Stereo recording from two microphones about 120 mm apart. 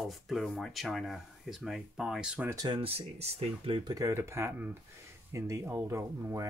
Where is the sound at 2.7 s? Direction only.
50° right (ahead or behind).